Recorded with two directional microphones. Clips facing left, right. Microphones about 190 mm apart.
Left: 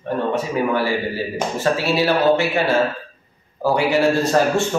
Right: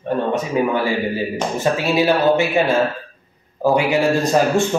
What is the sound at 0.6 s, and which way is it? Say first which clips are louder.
A man's voice: right 2 dB; 20° right (ahead or behind).